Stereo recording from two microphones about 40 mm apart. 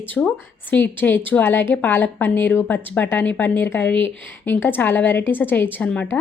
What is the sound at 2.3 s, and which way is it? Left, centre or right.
Speech, left.